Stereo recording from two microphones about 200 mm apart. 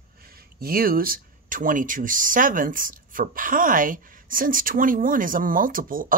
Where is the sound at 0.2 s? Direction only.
50° right (ahead or behind).